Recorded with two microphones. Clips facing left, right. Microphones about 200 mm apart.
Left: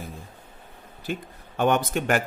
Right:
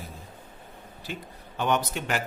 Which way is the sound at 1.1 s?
50° left (ahead or behind).